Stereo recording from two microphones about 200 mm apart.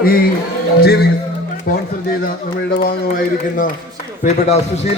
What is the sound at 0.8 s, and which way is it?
A man's voice, 50° left (ahead or behind).